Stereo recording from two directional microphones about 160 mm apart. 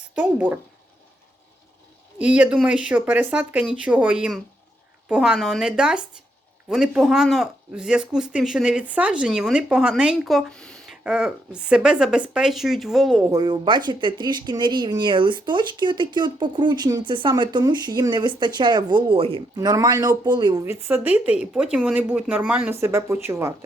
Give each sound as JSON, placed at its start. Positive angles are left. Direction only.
{"t": 0.2, "sound": "speech", "side_deg": -10}
{"t": 2.1, "sound": "speech", "side_deg": -10}
{"t": 13.2, "sound": "speech", "side_deg": -25}
{"t": 19.5, "sound": "speech", "side_deg": -20}